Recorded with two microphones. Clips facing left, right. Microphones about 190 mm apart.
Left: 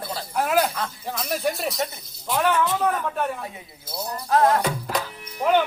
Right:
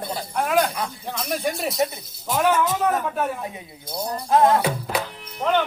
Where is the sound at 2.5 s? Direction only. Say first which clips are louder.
Right 2 dB; 45° right (ahead or behind).